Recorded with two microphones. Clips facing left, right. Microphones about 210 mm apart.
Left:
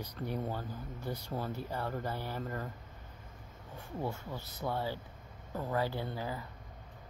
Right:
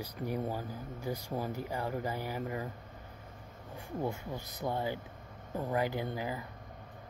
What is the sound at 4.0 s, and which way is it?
Speech, 15° right (ahead or behind).